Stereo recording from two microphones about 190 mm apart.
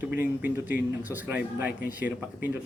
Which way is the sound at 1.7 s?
50° left (ahead or behind).